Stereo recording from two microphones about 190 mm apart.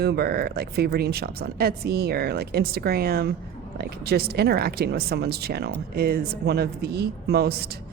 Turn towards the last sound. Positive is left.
turn(degrees=-55)  # may be behind; listen again after turning